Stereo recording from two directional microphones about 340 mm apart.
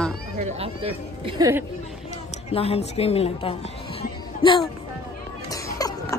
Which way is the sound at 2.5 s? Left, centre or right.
Centre.